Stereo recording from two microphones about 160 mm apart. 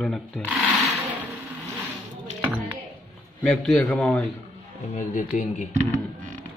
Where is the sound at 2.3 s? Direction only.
15° right (ahead or behind).